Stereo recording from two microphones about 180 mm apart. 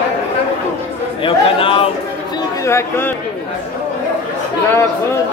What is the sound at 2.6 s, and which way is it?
Speech, 15° left (ahead or behind).